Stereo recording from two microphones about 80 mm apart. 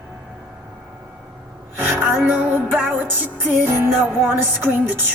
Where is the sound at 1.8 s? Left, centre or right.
Right.